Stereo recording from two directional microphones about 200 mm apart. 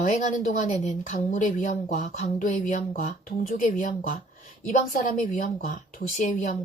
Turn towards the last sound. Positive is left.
turn(degrees=35)  # may be behind; listen again after turning